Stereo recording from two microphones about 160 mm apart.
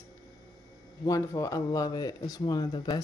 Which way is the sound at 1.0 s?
20° left (ahead or behind).